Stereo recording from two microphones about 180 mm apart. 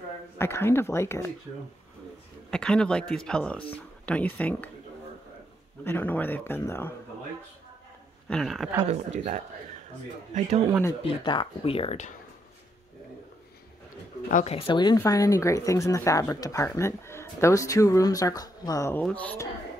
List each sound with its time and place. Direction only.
0.4 s speech: 15° left (ahead or behind)
2.5 s speech: 5° left (ahead or behind)
5.9 s speech: 10° left (ahead or behind)
8.3 s speech: centre (ahead or behind)
8.8 s speech: 40° right (ahead or behind)
11.0 s speech: 30° left (ahead or behind)
14.3 s speech: 35° left (ahead or behind); by 19.4 s 10° left (ahead or behind)